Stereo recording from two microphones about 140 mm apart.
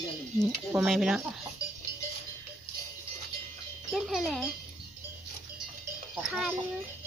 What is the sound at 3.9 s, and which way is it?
Speech, centre (ahead or behind).